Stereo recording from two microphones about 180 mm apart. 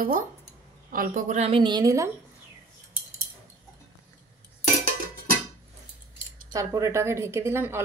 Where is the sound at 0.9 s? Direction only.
50° right (ahead or behind); by 2.0 s 20° right (ahead or behind).